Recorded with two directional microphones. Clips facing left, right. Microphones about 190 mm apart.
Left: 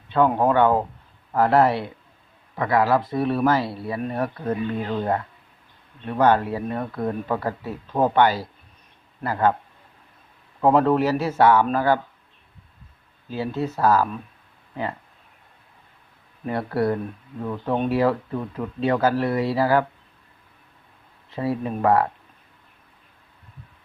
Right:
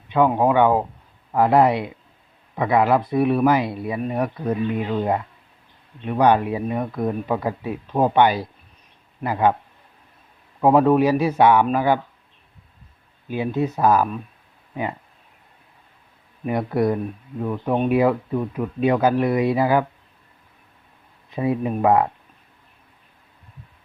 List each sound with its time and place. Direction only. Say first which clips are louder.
0.1 s speech: right 1 dB; 10° right (ahead or behind)
10.6 s speech: right 3 dB; 10° right (ahead or behind)
13.2 s speech: right 3 dB; 15° right (ahead or behind)
16.5 s speech: right 2 dB; 20° right (ahead or behind)
21.2 s speech: right 3 dB; 20° right (ahead or behind)